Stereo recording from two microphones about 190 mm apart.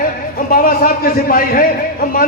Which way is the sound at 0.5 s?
50° left (ahead or behind).